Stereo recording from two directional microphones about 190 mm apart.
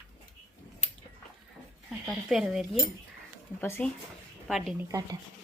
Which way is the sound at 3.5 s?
10° left (ahead or behind).